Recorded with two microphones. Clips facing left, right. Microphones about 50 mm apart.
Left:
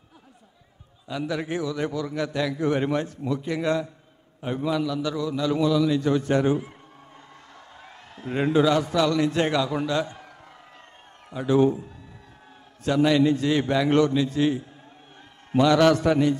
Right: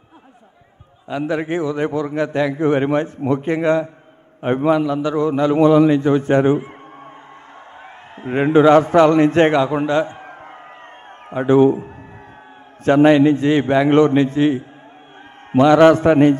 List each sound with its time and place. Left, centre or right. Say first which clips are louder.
1.0 s a man's voice: right 7 dB; right
7.8 s a man's voice: right 7 dB; right